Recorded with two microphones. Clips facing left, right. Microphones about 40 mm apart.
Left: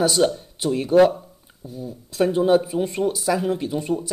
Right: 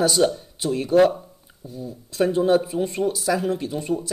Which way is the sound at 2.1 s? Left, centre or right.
Centre.